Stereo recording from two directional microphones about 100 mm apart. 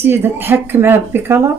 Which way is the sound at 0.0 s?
20° right (ahead or behind).